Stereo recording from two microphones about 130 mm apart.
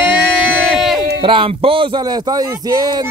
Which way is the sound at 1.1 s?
40° right (ahead or behind).